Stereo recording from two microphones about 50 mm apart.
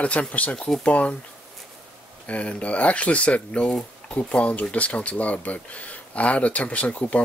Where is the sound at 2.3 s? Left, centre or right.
Left.